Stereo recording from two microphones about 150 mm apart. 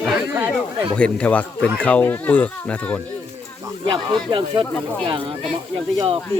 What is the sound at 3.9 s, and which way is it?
Speech, 30° right (ahead or behind).